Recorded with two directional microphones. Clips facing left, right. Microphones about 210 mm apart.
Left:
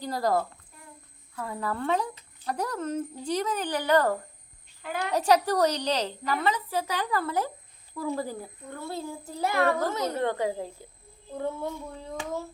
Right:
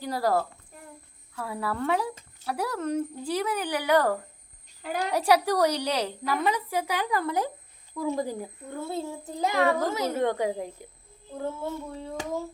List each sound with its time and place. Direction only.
0.0 s a child's voice: 10° right (ahead or behind)
5.1 s a child's voice: 10° right (ahead or behind)
11.3 s child singing: 5° right (ahead or behind)